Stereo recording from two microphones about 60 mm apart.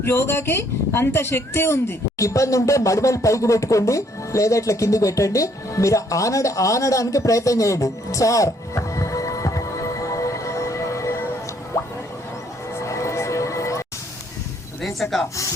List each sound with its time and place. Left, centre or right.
0.0 s a woman's voice: left
11.7 s a sound: left
12.8 s music: left
14.8 s speech: centre